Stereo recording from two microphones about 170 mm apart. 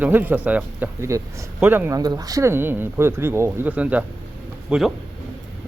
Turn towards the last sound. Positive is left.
turn(degrees=-5)  # may be behind; listen again after turning